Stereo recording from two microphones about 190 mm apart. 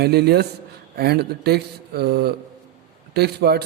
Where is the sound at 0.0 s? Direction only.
55° right (ahead or behind).